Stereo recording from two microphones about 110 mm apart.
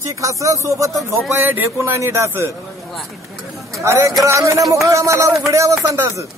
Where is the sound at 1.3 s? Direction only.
20° right (ahead or behind).